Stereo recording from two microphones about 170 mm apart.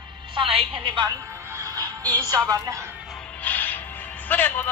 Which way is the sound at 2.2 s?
20° right (ahead or behind).